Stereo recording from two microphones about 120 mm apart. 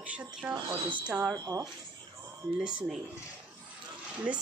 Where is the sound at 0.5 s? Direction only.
40° right (ahead or behind).